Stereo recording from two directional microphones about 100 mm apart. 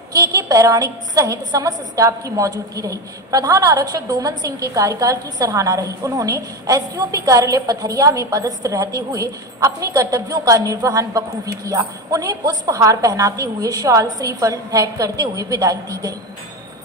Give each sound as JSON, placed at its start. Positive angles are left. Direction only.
{"t": 0.1, "sound": "a woman's voice", "side_deg": -35}